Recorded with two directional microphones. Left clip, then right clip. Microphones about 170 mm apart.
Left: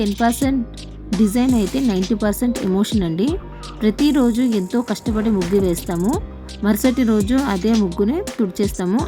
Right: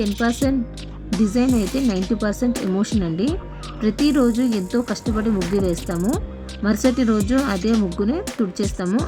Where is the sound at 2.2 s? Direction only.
20° left (ahead or behind).